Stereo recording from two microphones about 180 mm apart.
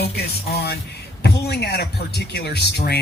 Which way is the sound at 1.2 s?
65° left (ahead or behind).